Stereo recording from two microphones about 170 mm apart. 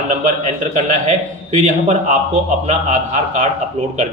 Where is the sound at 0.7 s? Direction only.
45° right (ahead or behind).